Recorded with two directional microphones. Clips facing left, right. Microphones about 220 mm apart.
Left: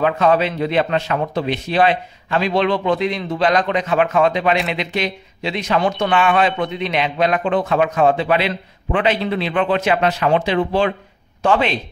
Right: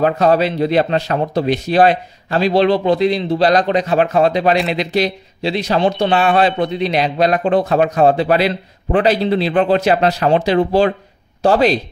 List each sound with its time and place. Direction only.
0.0 s speech: 40° right (ahead or behind)